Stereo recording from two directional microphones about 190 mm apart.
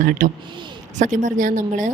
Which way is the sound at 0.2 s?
45° right (ahead or behind).